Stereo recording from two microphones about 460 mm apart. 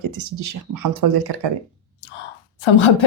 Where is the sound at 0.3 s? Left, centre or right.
Right.